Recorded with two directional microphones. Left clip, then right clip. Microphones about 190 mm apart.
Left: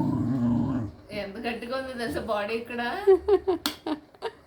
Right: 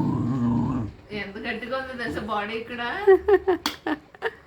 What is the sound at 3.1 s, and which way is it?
Speech, centre (ahead or behind).